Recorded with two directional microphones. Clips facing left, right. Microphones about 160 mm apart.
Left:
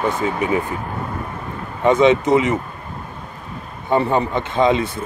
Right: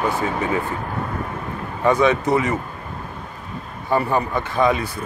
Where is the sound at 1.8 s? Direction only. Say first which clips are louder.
Left 3 dB; 20° left (ahead or behind).